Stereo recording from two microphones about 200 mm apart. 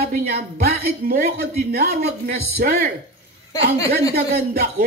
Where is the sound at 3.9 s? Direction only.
50° right (ahead or behind).